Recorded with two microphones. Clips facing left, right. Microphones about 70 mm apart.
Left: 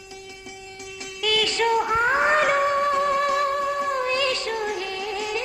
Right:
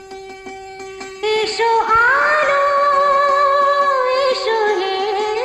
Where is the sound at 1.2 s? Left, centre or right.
Right.